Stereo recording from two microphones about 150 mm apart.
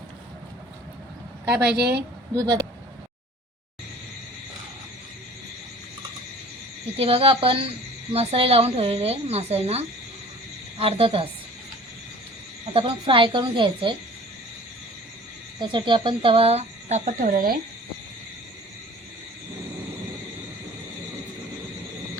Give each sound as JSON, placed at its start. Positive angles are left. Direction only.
{"t": 1.7, "sound": "a woman's voice", "side_deg": -90}
{"t": 2.3, "sound": "speech", "side_deg": -25}
{"t": 6.9, "sound": "a woman's voice", "side_deg": -40}
{"t": 12.6, "sound": "a woman's voice", "side_deg": -35}
{"t": 15.6, "sound": "speech", "side_deg": -35}